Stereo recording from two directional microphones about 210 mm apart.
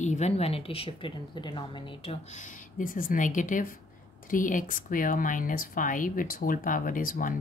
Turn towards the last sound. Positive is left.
turn(degrees=40)  # may be behind; listen again after turning